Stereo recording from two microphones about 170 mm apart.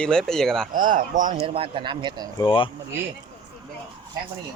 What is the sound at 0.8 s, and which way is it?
Speech, 50° right (ahead or behind).